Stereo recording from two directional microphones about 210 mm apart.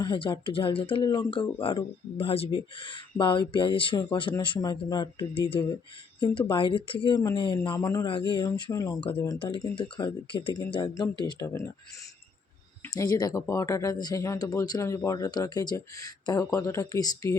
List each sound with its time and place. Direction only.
0.0 s speech: 20° left (ahead or behind)
12.9 s speech: 20° left (ahead or behind)